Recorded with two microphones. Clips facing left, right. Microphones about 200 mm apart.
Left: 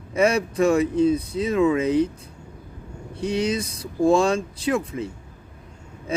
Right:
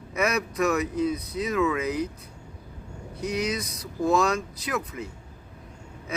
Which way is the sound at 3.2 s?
30° left (ahead or behind).